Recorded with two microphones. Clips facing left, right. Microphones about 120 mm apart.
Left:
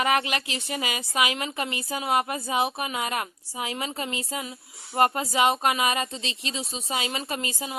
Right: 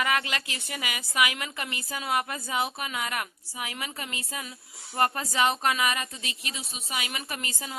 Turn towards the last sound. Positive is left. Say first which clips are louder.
# left 5 dB
turn(degrees=20)  # may be behind; listen again after turning